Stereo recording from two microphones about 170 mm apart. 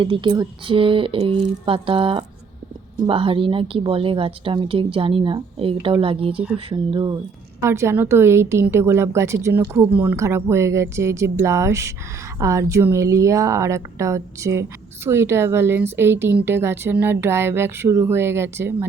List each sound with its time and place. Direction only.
0.0 s a woman's voice: 30° right (ahead or behind)
7.6 s speech: 15° right (ahead or behind)